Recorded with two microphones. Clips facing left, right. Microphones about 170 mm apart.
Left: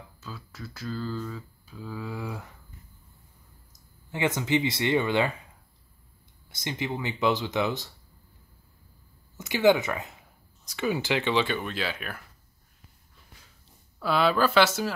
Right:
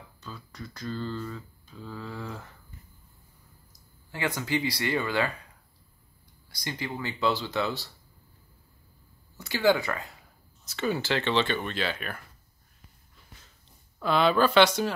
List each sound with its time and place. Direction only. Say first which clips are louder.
0.2 s speech: even; 5° left (ahead or behind)
3.7 s speech: left 5 dB; 20° left (ahead or behind)
6.5 s speech: left 3 dB; 20° left (ahead or behind)
9.4 s speech: left 3 dB; 20° left (ahead or behind)
13.9 s speech: right 1 dB; 5° left (ahead or behind)